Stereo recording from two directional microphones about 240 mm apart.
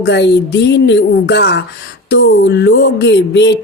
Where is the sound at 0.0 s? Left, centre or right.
Left.